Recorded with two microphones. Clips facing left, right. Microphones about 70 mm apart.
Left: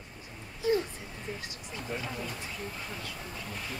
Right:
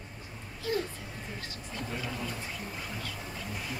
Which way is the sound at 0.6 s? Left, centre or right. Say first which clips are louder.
Left 5 dB; centre.